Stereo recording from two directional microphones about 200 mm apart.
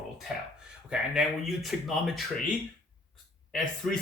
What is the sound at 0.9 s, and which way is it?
Speech, centre (ahead or behind).